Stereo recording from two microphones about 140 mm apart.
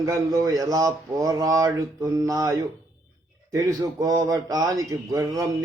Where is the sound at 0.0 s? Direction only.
25° right (ahead or behind).